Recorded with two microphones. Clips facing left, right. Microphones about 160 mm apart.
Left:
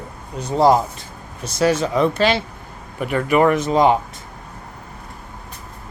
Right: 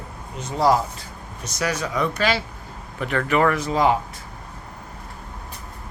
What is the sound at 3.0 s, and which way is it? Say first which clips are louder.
Speech: left 4 dB; 10° left (ahead or behind).